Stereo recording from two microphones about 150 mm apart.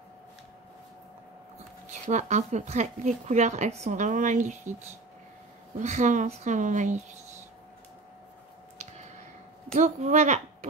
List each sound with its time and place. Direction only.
2.0 s speech: 50° right (ahead or behind)
9.8 s speech: 55° right (ahead or behind)